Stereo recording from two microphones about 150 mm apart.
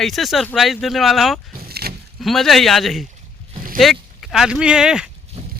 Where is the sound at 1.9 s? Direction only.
90° right.